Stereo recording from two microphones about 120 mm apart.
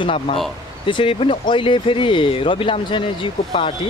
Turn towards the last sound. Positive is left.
turn(degrees=45)  # may be behind; listen again after turning